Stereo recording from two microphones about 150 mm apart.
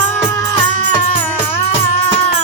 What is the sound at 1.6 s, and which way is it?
Music, 40° left (ahead or behind).